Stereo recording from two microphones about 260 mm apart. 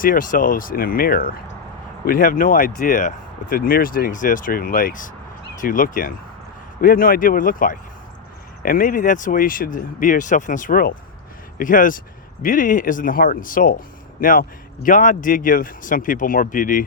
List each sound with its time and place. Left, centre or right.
0.0 s speech: left